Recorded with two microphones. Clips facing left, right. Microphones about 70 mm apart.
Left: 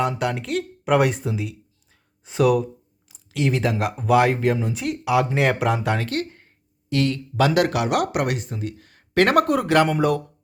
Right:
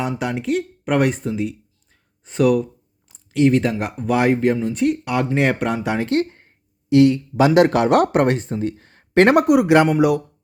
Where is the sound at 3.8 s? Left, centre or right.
Centre.